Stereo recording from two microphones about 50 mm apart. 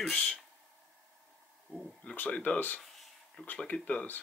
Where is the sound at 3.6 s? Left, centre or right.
Left.